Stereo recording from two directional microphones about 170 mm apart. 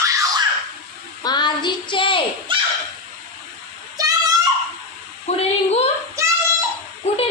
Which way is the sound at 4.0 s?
20° right (ahead or behind).